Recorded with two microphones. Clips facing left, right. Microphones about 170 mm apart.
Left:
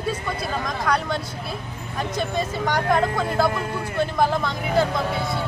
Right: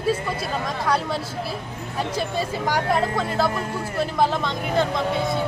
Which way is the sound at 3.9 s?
Centre (ahead or behind).